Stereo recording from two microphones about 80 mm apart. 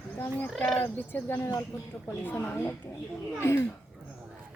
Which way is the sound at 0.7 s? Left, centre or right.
Left.